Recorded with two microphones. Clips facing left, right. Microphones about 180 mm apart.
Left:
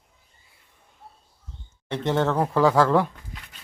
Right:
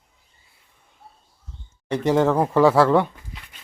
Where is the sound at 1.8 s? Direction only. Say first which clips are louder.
Right 5 dB; 10° right (ahead or behind).